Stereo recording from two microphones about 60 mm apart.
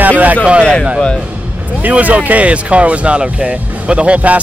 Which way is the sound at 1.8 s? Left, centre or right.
Right.